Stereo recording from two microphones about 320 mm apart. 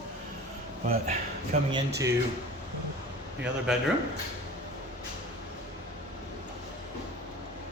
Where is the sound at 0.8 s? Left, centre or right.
Right.